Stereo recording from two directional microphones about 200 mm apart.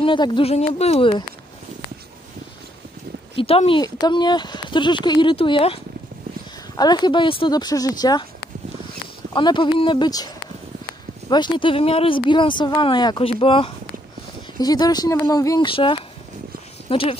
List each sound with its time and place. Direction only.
0.0 s speech: 25° left (ahead or behind)
3.3 s speech: 30° left (ahead or behind)
6.8 s speech: 20° left (ahead or behind)
9.3 s speech: 25° left (ahead or behind)